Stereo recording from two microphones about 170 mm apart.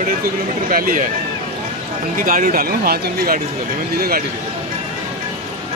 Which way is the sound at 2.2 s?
55° right (ahead or behind).